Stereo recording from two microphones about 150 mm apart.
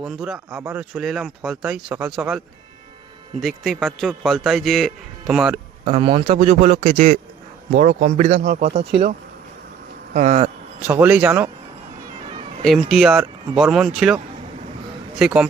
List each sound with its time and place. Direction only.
0.0 s a man's voice: 5° right (ahead or behind)
3.4 s a man's voice: centre (ahead or behind)
5.8 s speech: 40° right (ahead or behind)
6.3 s speech: 50° right (ahead or behind)
10.2 s speech: 50° right (ahead or behind)
10.8 s speech: 10° right (ahead or behind)
12.6 s a man's voice: centre (ahead or behind)
15.2 s a man's voice: 5° right (ahead or behind)